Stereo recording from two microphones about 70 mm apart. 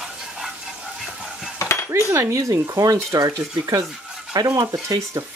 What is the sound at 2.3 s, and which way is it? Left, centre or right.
Speech, right.